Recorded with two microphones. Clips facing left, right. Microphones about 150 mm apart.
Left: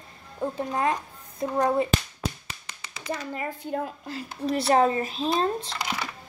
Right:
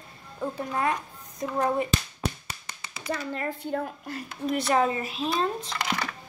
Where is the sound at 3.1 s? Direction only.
10° left (ahead or behind).